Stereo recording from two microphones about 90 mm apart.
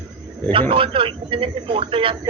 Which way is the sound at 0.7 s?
80° right.